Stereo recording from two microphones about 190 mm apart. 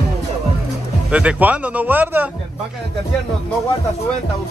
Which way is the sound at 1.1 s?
5° right (ahead or behind).